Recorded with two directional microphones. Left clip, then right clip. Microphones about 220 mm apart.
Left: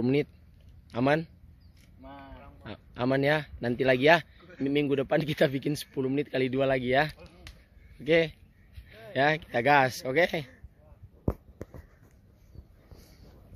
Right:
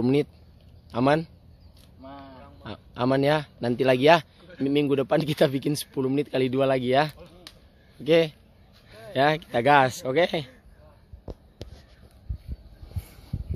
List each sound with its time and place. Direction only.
0.0 s speech: 5° right (ahead or behind)
2.0 s a sound: 5° left (ahead or behind)
2.4 s a man's voice: 5° right (ahead or behind)